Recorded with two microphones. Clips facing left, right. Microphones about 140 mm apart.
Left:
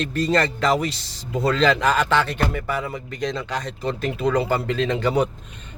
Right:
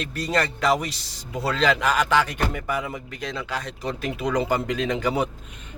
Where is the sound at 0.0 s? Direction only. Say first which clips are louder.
Left 4 dB; 10° right (ahead or behind).